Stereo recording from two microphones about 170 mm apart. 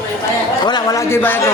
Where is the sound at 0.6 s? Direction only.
25° left (ahead or behind).